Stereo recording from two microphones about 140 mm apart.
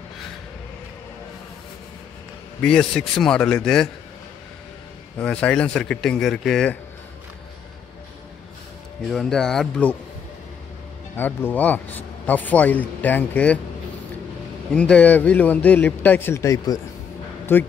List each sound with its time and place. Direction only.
2.6 s a man's voice: 5° left (ahead or behind)
5.2 s a man's voice: 10° left (ahead or behind)
9.1 s a man's voice: 5° left (ahead or behind)
11.1 s a man's voice: 15° left (ahead or behind)
14.7 s a man's voice: 5° left (ahead or behind)